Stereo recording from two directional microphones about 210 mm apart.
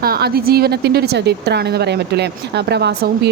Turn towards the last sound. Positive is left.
turn(degrees=-50)  # may be behind; listen again after turning